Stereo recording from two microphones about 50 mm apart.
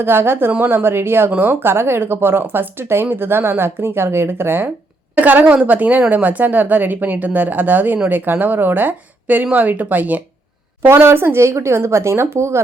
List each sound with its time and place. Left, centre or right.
0.0 s speech: right
1.3 s speech: right
1.7 s speech: right
5.1 s speech: right
11.0 s speech: right